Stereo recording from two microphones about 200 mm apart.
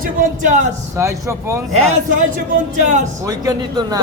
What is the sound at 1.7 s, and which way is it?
A man's voice, 35° right (ahead or behind).